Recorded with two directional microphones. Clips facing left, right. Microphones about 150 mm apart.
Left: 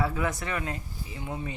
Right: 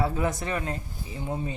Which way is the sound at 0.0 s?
25° right (ahead or behind).